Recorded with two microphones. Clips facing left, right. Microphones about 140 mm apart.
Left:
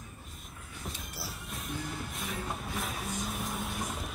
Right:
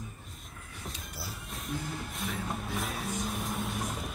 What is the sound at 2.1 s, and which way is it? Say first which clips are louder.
Music: right 4 dB; centre (ahead or behind).